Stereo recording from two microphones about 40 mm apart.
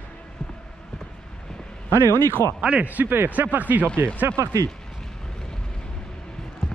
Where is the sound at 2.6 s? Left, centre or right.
Right.